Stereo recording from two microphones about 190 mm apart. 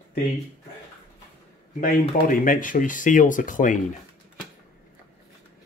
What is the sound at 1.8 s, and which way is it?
Speech, 45° left (ahead or behind).